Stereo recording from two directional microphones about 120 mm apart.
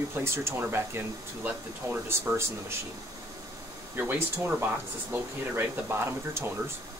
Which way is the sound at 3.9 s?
15° right (ahead or behind).